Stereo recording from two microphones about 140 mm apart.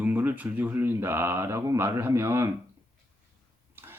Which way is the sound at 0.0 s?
10° right (ahead or behind).